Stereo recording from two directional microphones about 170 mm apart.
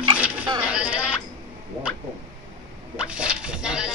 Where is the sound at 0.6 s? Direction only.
10° right (ahead or behind).